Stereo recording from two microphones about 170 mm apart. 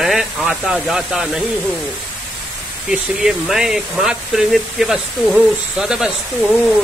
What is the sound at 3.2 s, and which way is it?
Speech, 5° right (ahead or behind).